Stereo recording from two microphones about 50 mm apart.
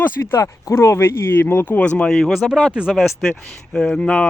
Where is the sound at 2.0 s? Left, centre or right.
Centre.